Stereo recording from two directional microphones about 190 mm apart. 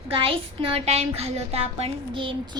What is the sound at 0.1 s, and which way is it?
A woman's voice, 30° right (ahead or behind).